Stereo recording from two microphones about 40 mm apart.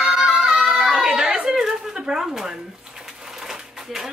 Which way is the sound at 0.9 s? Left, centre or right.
Right.